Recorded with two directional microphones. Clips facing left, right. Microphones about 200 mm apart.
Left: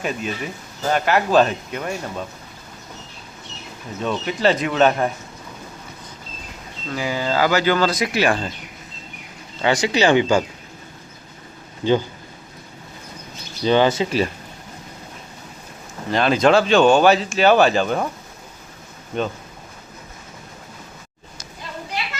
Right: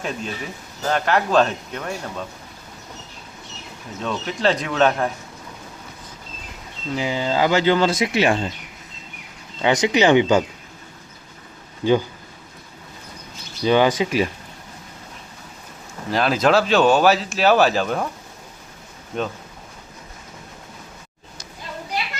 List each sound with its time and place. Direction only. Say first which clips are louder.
0.0 s speech: left 3 dB; 5° left (ahead or behind)
4.0 s speech: left 2 dB; 5° left (ahead or behind)
6.9 s speech: even; 20° right (ahead or behind)
9.6 s speech: right 1 dB; 20° right (ahead or behind)
11.8 s speech: even; 10° right (ahead or behind)
13.7 s speech: even; 10° right (ahead or behind)
16.0 s speech: left 2 dB; centre (ahead or behind)
19.1 s speech: left 2 dB; centre (ahead or behind)